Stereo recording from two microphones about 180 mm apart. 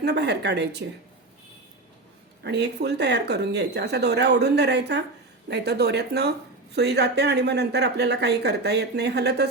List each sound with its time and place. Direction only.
0.0 s speech: 70° right (ahead or behind)
2.4 s speech: 70° right (ahead or behind)